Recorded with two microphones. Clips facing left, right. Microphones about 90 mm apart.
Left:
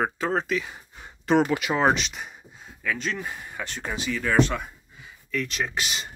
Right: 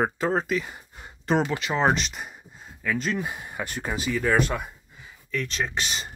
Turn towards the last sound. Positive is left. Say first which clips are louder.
# even
turn(degrees=5)  # may be behind; listen again after turning